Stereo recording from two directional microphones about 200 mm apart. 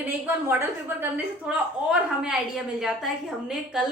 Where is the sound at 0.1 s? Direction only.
10° right (ahead or behind).